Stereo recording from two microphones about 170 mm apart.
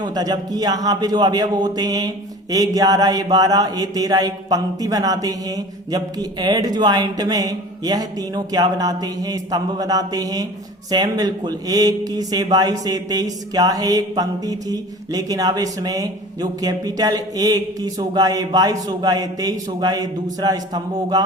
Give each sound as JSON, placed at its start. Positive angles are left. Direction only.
{"t": 0.0, "sound": "speech", "side_deg": -20}